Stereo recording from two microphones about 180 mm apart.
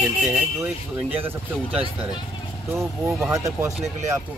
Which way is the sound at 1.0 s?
10° right (ahead or behind).